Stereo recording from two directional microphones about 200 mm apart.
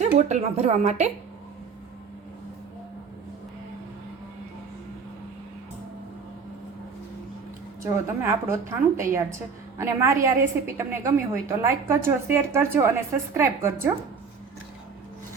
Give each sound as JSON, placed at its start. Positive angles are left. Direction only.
{"t": 0.2, "sound": "a woman's voice", "side_deg": -35}
{"t": 7.9, "sound": "a woman's voice", "side_deg": -15}